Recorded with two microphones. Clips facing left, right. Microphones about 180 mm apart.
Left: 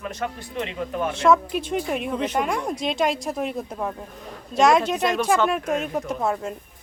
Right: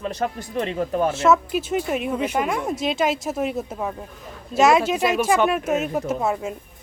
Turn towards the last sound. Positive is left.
turn(degrees=-5)  # may be behind; listen again after turning